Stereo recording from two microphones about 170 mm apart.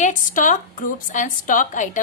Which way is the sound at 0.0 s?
50° left (ahead or behind).